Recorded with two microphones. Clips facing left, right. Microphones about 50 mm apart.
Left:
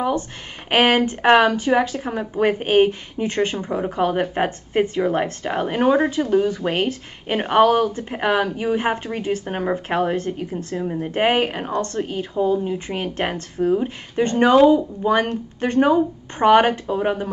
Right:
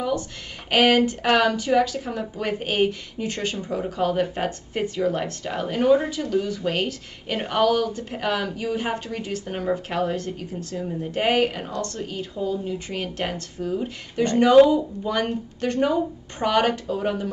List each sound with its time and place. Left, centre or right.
0.7 s speech: left